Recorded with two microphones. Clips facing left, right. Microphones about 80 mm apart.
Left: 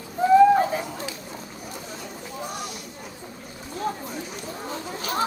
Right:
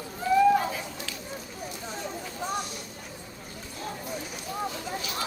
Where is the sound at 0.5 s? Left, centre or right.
Left.